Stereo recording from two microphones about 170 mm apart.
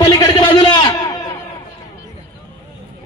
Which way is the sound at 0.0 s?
25° left (ahead or behind).